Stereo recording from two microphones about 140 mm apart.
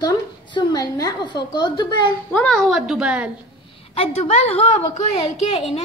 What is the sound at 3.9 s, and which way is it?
A woman's voice, 45° left (ahead or behind).